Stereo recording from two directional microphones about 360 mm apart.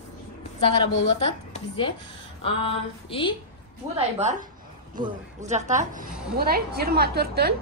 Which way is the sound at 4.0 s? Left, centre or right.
Centre.